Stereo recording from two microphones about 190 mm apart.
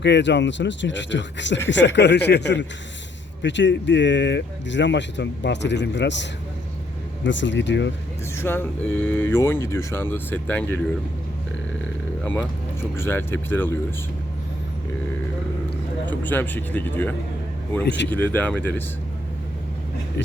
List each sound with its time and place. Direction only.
0.0 s speech: 65° left (ahead or behind)
7.3 s speech: 75° left (ahead or behind)
8.4 s speech: 10° left (ahead or behind)
12.2 s speech: 10° left (ahead or behind)
16.0 s speech: 10° left (ahead or behind)
17.8 s speech: 70° left (ahead or behind)
18.1 s speech: 10° left (ahead or behind)